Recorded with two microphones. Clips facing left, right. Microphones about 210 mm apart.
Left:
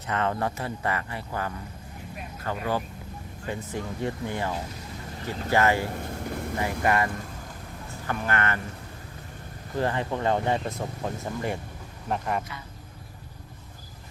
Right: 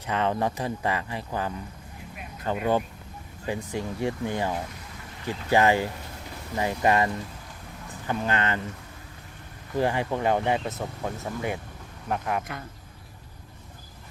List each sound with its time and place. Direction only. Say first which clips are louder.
0.1 s speech: right 2 dB; 15° right (ahead or behind)
6.0 s a sound: left 8 dB; 55° left (ahead or behind)
6.6 s speech: right 3 dB; 20° right (ahead or behind)
9.7 s speech: right 2 dB; 15° right (ahead or behind)